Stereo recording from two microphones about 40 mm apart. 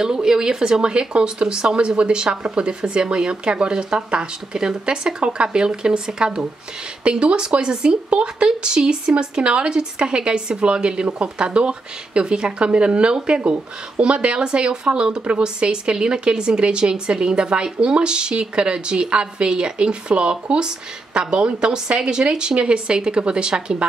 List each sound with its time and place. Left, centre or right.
0.0 s a woman's voice: centre